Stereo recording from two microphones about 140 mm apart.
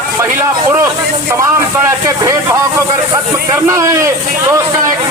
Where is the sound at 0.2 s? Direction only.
15° right (ahead or behind).